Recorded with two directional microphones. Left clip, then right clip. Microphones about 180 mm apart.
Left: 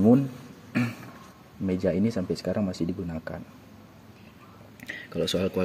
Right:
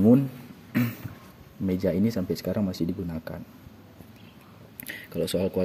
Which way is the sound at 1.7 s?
20° right (ahead or behind).